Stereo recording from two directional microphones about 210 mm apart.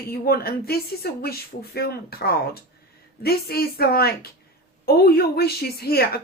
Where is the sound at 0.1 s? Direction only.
45° left (ahead or behind).